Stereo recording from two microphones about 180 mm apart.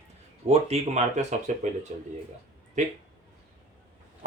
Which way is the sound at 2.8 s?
40° right (ahead or behind).